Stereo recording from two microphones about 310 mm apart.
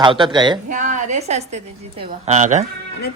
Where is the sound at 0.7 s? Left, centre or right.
Right.